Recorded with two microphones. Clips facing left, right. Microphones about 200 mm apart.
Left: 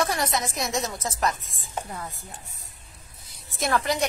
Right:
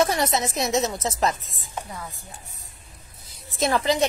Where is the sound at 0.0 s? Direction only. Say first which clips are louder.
Right 4 dB; 25° right (ahead or behind).